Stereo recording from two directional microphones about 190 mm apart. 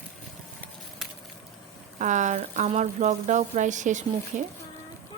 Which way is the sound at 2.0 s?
40° right (ahead or behind).